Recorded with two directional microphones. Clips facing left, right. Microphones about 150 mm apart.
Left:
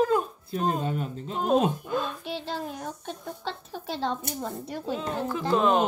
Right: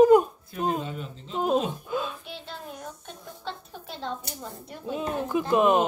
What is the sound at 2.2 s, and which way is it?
A child's voice, 90° left.